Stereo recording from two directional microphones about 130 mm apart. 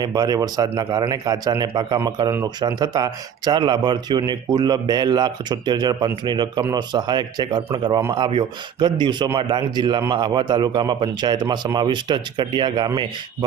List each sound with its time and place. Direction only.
0.0 s speech: 30° right (ahead or behind)